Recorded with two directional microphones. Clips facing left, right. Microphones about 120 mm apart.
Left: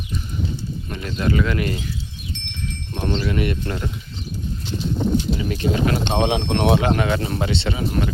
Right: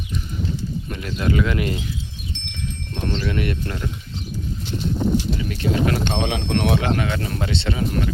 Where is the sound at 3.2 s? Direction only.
5° left (ahead or behind).